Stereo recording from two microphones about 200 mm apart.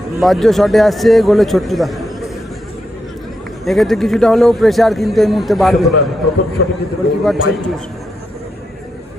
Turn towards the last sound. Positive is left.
turn(degrees=0)  # may be behind; listen again after turning